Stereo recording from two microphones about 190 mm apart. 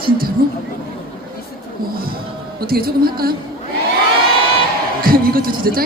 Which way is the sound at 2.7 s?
50° right (ahead or behind).